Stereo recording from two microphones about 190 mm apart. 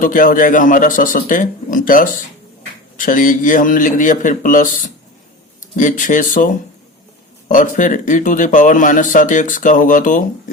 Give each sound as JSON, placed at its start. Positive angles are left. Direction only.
{"t": 0.0, "sound": "speech", "side_deg": 45}